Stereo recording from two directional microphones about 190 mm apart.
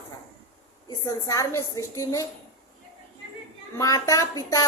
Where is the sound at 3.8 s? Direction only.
20° left (ahead or behind).